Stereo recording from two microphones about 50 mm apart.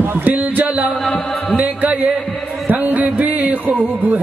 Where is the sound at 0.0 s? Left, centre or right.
Right.